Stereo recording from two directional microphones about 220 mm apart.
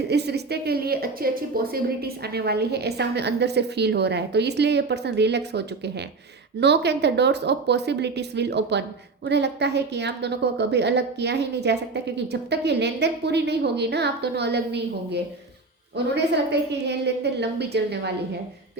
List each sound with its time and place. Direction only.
0.1 s a woman's voice: 50° right (ahead or behind)